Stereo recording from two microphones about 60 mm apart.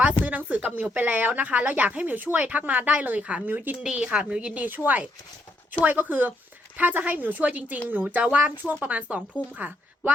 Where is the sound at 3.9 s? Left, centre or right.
Centre.